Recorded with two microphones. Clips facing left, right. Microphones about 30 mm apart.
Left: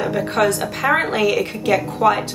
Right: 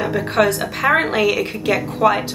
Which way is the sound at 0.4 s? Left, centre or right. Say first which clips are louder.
Right 2 dB; centre.